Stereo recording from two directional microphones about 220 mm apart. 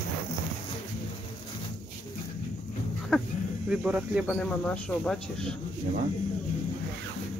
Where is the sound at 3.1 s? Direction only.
Centre (ahead or behind).